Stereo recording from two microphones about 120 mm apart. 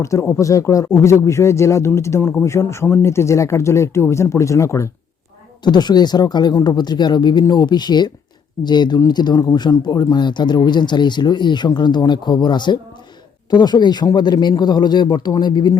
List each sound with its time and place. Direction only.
0.0 s speech: 25° left (ahead or behind)
5.6 s speech: 35° left (ahead or behind)